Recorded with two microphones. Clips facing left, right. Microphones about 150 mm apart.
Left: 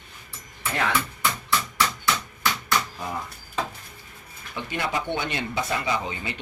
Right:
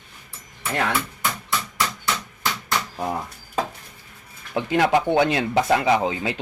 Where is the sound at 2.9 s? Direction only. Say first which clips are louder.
Right 6 dB; 40° right (ahead or behind).